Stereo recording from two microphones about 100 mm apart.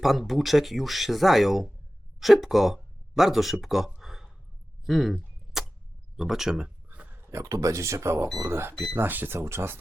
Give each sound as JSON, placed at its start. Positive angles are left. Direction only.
{"t": 0.0, "sound": "speech", "side_deg": 0}
{"t": 4.9, "sound": "arrow", "side_deg": -5}
{"t": 6.1, "sound": "a sound", "side_deg": -5}
{"t": 7.3, "sound": "speech", "side_deg": -35}